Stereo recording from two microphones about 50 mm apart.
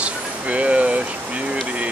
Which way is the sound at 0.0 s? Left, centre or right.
Right.